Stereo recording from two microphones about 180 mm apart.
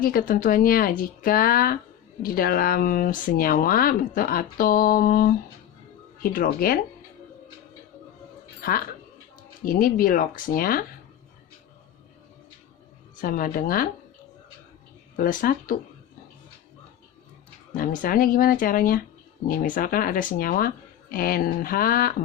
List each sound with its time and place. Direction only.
0.0 s speech: 55° left (ahead or behind)
9.6 s speech: 50° left (ahead or behind)
13.1 s speech: 50° left (ahead or behind)
15.1 s speech: 50° left (ahead or behind)
17.7 s speech: 50° left (ahead or behind)